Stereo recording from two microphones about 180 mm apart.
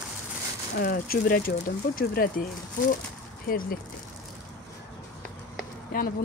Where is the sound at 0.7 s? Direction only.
55° left (ahead or behind).